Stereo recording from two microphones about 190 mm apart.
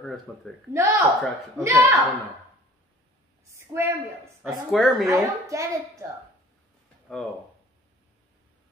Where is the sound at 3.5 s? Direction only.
15° right (ahead or behind).